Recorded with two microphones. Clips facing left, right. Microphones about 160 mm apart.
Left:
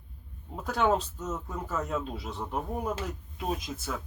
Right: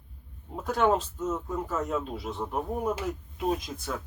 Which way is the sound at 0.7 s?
Centre (ahead or behind).